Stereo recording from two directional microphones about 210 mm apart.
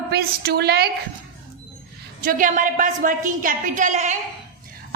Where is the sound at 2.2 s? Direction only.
40° right (ahead or behind).